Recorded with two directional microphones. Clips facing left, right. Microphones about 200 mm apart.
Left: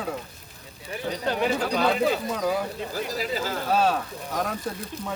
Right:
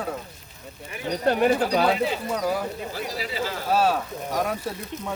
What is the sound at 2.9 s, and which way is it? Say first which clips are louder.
Speech: left 2 dB; 45° left (ahead or behind).